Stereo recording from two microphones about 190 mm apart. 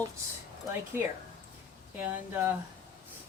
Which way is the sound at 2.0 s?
10° right (ahead or behind).